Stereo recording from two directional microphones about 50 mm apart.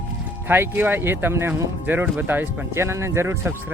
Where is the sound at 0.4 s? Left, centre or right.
Right.